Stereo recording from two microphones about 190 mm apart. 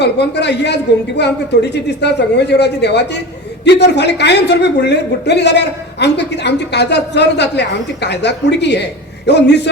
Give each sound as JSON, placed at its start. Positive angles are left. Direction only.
{"t": 0.0, "sound": "a woman's voice", "side_deg": 65}